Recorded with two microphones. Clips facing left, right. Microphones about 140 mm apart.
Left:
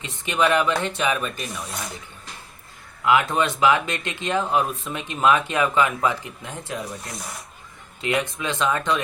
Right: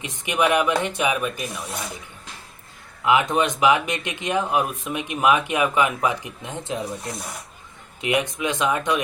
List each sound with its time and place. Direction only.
0.0 s speech: 15° right (ahead or behind)
3.0 s speech: 20° right (ahead or behind)